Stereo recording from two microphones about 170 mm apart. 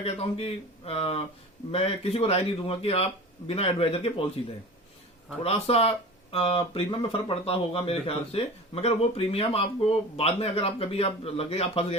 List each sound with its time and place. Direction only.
0.0 s speech: 35° left (ahead or behind)
5.4 s speech: 35° left (ahead or behind)